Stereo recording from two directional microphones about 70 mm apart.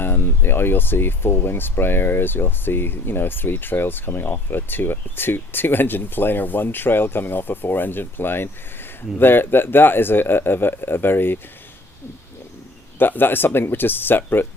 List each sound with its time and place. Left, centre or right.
0.0 s speech: left
13.0 s speech: left